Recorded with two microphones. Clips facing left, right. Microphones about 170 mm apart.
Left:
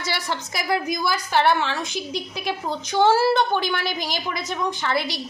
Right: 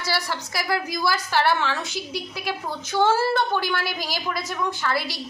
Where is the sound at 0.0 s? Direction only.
20° left (ahead or behind).